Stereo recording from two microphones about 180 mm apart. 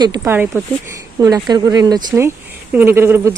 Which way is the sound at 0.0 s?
20° right (ahead or behind).